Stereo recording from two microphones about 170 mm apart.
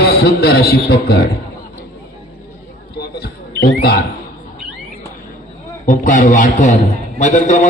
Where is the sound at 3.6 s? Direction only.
65° left (ahead or behind).